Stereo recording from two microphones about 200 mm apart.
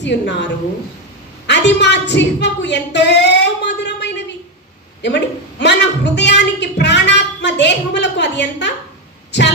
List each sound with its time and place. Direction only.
0.0 s a woman's voice: 60° left (ahead or behind)
1.5 s a sound: 60° left (ahead or behind)
5.0 s a woman's voice: 60° left (ahead or behind)